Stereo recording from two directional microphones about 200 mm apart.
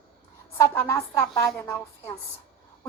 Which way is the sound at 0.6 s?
15° left (ahead or behind).